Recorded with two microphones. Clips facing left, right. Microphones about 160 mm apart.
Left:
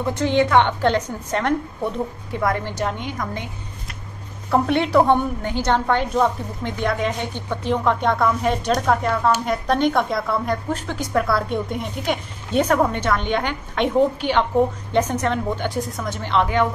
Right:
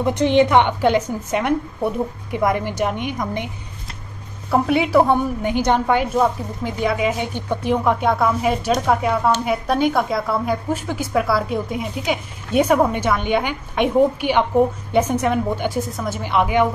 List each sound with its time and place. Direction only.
0.0 s a woman's voice: 20° right (ahead or behind)
4.5 s a woman's voice: 5° right (ahead or behind)